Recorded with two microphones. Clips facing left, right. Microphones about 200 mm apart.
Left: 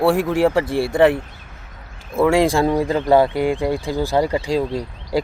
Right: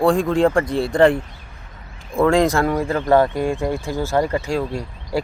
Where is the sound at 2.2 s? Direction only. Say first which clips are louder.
Left 1 dB; 10° left (ahead or behind).